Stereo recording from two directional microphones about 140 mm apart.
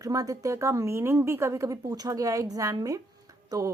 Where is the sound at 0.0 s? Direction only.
25° right (ahead or behind).